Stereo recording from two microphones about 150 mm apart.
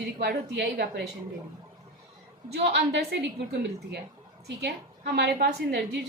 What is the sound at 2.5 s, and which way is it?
Speech, 90° right.